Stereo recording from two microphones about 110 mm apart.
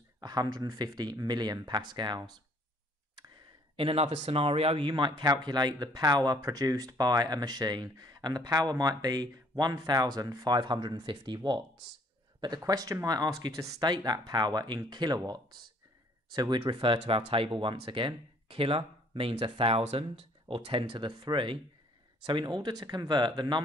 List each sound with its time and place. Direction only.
0.2 s speech: 40° right (ahead or behind)
3.7 s speech: 60° right (ahead or behind); by 23.6 s 40° right (ahead or behind)